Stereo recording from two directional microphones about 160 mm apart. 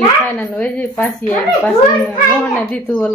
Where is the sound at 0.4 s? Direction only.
10° left (ahead or behind).